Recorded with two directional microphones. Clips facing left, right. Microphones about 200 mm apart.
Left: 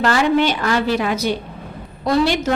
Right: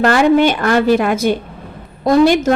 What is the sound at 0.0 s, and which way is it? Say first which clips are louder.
A woman's voice: right 5 dB; 50° right (ahead or behind).